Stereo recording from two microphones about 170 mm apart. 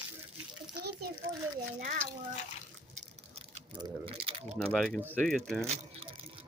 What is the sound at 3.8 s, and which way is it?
Speech, 30° right (ahead or behind).